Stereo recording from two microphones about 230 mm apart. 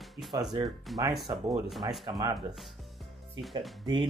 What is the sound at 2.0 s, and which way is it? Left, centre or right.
Speech, centre.